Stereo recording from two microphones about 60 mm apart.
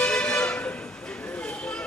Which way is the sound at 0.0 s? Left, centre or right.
Centre.